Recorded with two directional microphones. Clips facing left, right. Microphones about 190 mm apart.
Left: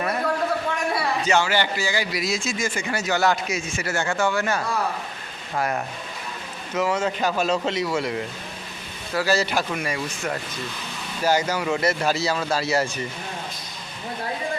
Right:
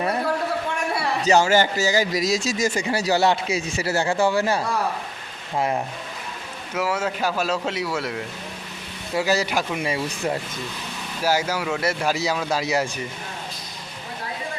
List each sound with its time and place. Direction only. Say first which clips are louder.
1.2 s speech: right 6 dB; 40° right (ahead or behind); by 5.8 s 20° right (ahead or behind)
6.7 s speech: left 1 dB; 5° right (ahead or behind)
9.1 s speech: even; 15° right (ahead or behind)
9.8 s speech: right 3 dB; 25° right (ahead or behind)
11.2 s speech: left 1 dB; 5° right (ahead or behind)